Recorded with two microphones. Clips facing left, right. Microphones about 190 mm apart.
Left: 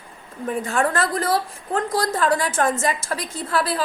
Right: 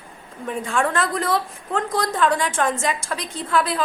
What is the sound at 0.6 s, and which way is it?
A woman's voice, 40° left (ahead or behind).